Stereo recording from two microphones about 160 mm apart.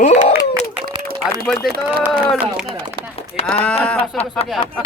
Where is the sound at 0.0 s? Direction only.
45° left (ahead or behind).